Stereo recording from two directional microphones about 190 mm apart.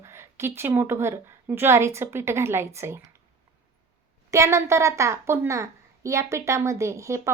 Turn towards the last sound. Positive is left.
turn(degrees=-15)  # may be behind; listen again after turning